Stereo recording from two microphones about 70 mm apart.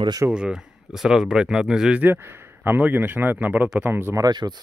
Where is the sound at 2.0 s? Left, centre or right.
Right.